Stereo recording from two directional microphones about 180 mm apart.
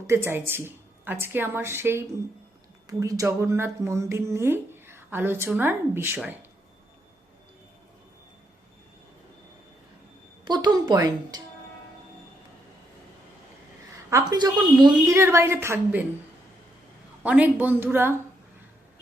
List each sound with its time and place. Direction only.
0.1 s speech: 10° right (ahead or behind)
10.4 s music: 25° right (ahead or behind)
14.1 s speech: 20° right (ahead or behind)
17.2 s speech: 10° right (ahead or behind)